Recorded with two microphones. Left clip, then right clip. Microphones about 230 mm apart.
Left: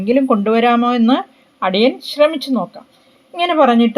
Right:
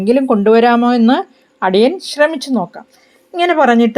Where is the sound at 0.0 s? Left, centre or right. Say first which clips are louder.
Right 3 dB; right.